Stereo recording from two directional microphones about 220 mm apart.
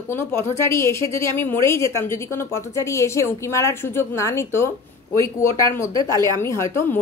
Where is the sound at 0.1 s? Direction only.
10° left (ahead or behind).